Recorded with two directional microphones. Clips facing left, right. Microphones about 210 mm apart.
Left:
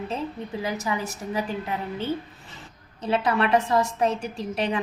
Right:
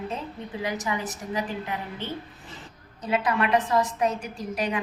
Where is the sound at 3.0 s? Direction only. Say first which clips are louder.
Left 2 dB; 25° left (ahead or behind).